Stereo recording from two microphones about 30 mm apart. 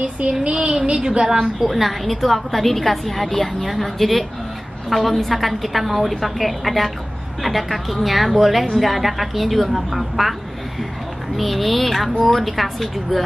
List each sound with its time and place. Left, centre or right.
0.5 s a woman's voice: right
0.9 s a woman's voice: right
1.4 s a woman's voice: centre
11.3 s a woman's voice: centre